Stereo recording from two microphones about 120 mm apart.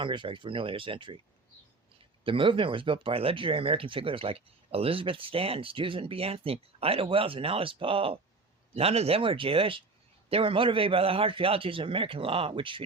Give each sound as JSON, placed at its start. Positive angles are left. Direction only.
{"t": 0.0, "sound": "speech", "side_deg": -45}
{"t": 2.2, "sound": "speech", "side_deg": -45}